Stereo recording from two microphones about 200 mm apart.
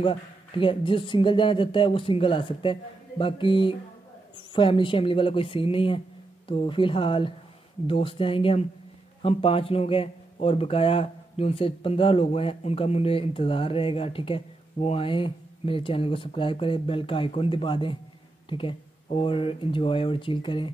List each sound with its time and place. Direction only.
0.0 s speech: 25° left (ahead or behind)